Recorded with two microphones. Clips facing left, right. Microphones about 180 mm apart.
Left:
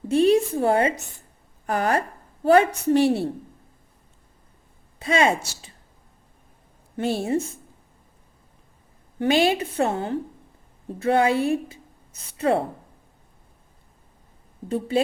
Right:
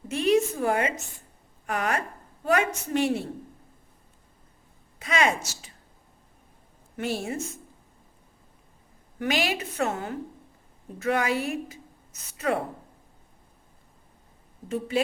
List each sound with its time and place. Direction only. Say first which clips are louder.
0.1 s a woman's voice: left 5 dB; 30° left (ahead or behind)
4.9 s speech: left 4 dB; 30° left (ahead or behind)
6.9 s a woman's voice: left 6 dB; 30° left (ahead or behind)
9.1 s a woman's voice: left 7 dB; 30° left (ahead or behind)
14.7 s a woman's voice: left 4 dB; 30° left (ahead or behind)